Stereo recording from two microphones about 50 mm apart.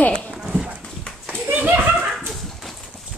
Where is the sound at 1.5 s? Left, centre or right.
Right.